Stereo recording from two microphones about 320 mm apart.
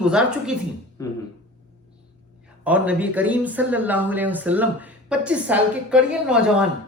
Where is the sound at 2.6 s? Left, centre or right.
Centre.